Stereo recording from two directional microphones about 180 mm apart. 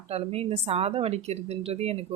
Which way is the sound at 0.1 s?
35° right (ahead or behind).